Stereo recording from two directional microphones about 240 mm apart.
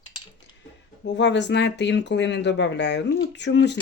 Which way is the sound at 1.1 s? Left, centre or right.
Left.